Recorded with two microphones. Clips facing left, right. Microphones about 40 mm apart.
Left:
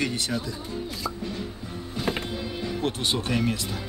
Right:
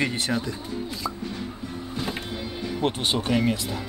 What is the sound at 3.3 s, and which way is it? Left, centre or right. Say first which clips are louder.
Speech: right 4 dB; centre.